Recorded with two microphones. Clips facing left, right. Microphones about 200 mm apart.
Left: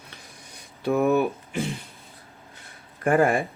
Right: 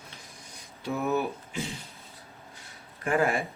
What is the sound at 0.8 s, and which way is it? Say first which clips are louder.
Speech: left 7 dB; 60° left (ahead or behind).